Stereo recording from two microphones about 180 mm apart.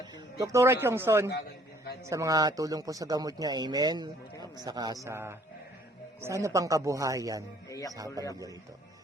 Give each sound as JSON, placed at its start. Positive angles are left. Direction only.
{"t": 0.3, "sound": "speech", "side_deg": -20}
{"t": 7.7, "sound": "speech", "side_deg": 20}
{"t": 7.9, "sound": "speech", "side_deg": -20}